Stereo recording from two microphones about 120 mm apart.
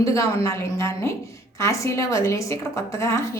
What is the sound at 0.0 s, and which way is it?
A woman's voice, 25° left (ahead or behind).